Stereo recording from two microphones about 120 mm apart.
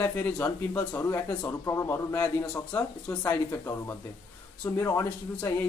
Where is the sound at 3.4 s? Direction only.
25° left (ahead or behind).